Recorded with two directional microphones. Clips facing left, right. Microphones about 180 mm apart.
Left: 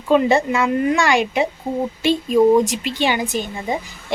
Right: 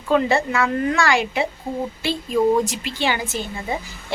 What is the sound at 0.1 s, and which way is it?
A woman's voice, 20° left (ahead or behind).